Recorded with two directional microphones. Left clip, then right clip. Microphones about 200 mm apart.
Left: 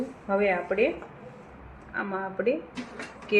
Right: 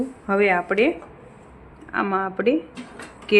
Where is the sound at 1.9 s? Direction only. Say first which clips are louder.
Right 8 dB; 50° right (ahead or behind).